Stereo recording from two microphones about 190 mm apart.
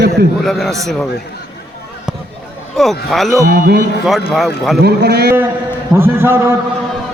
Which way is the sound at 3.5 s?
60° right (ahead or behind).